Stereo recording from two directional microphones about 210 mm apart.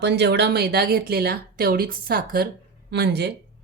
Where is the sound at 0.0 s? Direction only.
55° right (ahead or behind).